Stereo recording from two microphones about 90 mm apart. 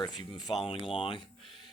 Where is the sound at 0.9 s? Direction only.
75° left (ahead or behind).